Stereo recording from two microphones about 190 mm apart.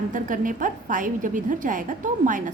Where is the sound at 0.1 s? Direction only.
45° right (ahead or behind).